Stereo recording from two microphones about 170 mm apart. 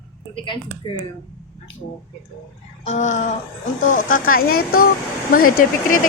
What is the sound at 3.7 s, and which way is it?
Speech, 50° left (ahead or behind).